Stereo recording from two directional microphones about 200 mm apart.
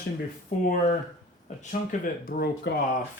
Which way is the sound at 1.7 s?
45° left (ahead or behind).